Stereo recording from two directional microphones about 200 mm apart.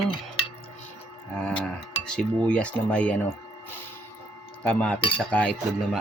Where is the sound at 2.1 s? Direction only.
5° left (ahead or behind).